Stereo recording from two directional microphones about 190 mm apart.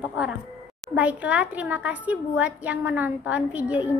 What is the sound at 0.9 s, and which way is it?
A woman's voice, 5° right (ahead or behind).